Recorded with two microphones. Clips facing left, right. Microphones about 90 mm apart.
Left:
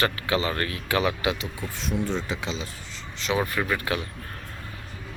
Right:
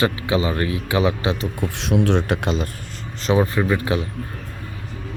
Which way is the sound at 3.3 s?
25° right (ahead or behind).